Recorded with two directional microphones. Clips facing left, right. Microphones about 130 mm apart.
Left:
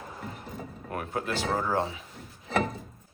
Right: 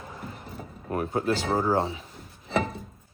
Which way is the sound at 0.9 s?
30° right (ahead or behind).